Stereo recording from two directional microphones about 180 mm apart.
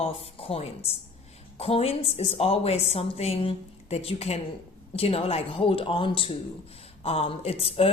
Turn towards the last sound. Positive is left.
turn(degrees=30)  # may be behind; listen again after turning